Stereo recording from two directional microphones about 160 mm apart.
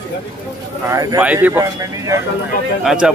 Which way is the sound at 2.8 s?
5° right (ahead or behind).